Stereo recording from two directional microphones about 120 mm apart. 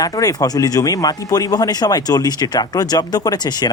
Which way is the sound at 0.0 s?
30° left (ahead or behind).